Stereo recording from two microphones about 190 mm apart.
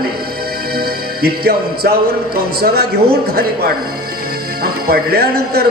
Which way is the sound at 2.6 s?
55° right (ahead or behind).